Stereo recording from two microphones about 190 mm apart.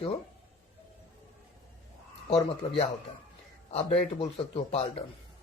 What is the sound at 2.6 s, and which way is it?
A man's voice, 30° left (ahead or behind).